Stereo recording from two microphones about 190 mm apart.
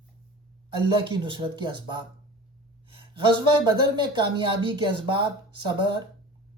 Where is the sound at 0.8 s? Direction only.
25° right (ahead or behind).